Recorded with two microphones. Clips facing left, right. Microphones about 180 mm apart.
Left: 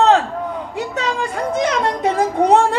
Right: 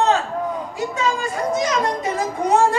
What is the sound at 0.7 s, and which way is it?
Speech, 70° left (ahead or behind).